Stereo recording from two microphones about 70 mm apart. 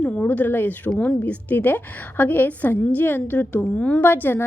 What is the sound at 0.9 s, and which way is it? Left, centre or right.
A woman's voice, centre.